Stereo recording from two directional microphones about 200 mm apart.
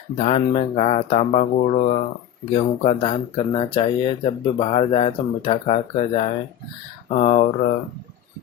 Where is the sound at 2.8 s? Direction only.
30° left (ahead or behind).